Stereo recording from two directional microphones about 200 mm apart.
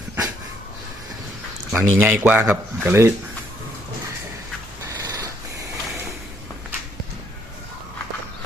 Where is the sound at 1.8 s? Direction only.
10° right (ahead or behind).